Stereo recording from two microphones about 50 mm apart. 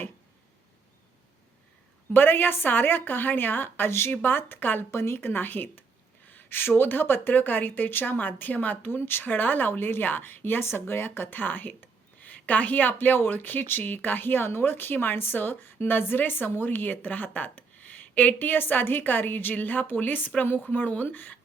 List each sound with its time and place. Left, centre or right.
2.1 s a woman's voice: left
4.1 s a woman's voice: left
4.9 s a woman's voice: left
9.2 s a woman's voice: left